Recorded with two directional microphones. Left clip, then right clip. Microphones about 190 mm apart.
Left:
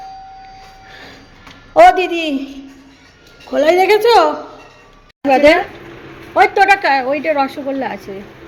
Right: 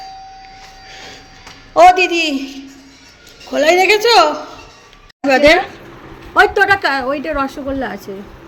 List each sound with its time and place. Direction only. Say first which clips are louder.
0.9 s train: right 3 dB; 20° left (ahead or behind)
1.7 s a man's voice: even; 15° left (ahead or behind)
5.3 s speech: even; 5° right (ahead or behind)
6.5 s a woman's voice: left 2 dB; 20° right (ahead or behind)